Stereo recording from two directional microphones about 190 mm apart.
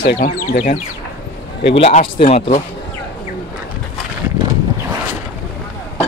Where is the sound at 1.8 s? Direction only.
30° left (ahead or behind).